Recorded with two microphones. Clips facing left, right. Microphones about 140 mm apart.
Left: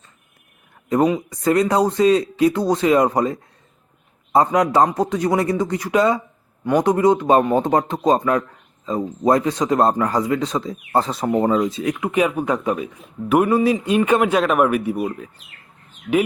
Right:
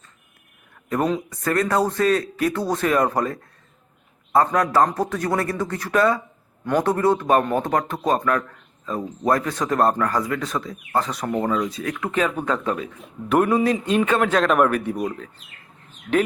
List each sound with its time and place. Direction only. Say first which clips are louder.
1.0 s speech: left 5 dB; 15° left (ahead or behind)